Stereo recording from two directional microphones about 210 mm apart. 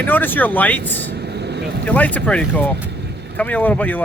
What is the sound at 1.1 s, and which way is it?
Vehicle, 50° right (ahead or behind).